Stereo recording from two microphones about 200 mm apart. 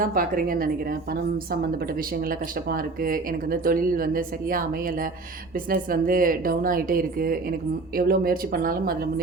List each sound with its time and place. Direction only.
0.0 s speech: 45° right (ahead or behind)
2.6 s speech: 45° right (ahead or behind)